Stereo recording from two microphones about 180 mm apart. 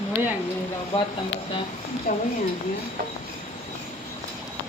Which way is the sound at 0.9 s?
30° left (ahead or behind).